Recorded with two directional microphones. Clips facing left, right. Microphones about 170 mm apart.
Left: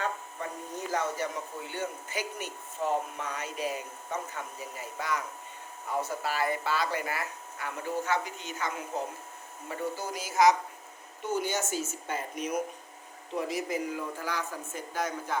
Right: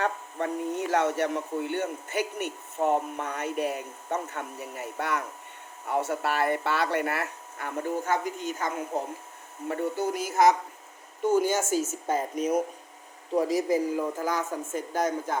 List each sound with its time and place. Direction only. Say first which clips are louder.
0.0 s speech: right 5 dB; 65° right (ahead or behind); by 8.7 s 45° right (ahead or behind)
9.6 s speech: right 6 dB; 60° right (ahead or behind)
11.3 s speech: right 7 dB; 45° right (ahead or behind)